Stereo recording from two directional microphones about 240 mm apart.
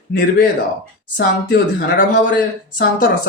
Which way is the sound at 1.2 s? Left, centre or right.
Left.